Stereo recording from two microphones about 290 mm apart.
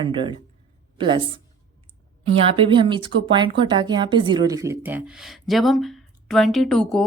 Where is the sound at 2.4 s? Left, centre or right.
Centre.